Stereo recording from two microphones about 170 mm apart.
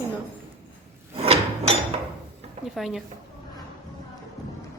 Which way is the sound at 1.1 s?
35° right (ahead or behind).